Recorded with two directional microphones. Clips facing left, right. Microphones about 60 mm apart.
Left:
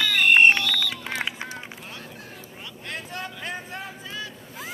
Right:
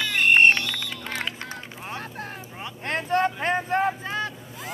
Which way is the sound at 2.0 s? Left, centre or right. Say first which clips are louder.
Right 6 dB; right.